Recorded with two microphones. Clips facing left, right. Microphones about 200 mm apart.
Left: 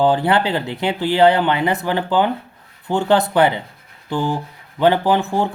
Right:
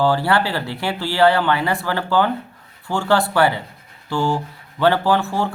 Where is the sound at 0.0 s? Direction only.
20° left (ahead or behind).